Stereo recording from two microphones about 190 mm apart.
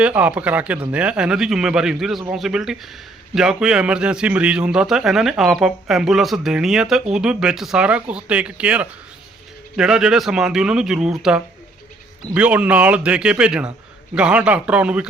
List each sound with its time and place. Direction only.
0.0 s a man's voice: 5° right (ahead or behind)